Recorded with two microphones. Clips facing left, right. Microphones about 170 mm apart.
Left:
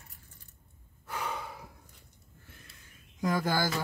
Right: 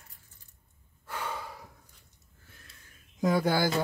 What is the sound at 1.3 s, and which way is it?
Gasp, centre (ahead or behind).